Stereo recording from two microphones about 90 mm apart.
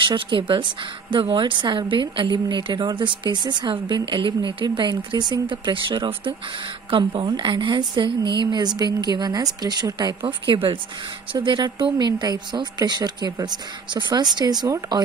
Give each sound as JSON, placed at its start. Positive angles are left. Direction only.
{"t": 0.0, "sound": "a woman's voice", "side_deg": -60}
{"t": 10.2, "sound": "a woman's voice", "side_deg": -70}
{"t": 11.3, "sound": "a woman's voice", "side_deg": -55}